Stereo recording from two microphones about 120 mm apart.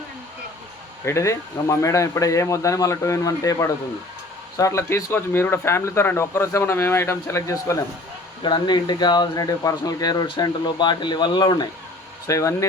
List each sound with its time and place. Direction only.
1.0 s speech: 25° left (ahead or behind)
8.4 s speech: 40° left (ahead or behind)
12.3 s speech: 25° left (ahead or behind)